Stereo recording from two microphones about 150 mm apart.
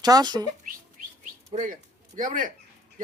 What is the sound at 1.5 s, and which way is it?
Speech, 60° right (ahead or behind).